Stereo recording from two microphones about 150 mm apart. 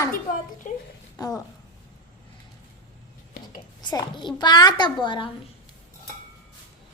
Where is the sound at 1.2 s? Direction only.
25° left (ahead or behind).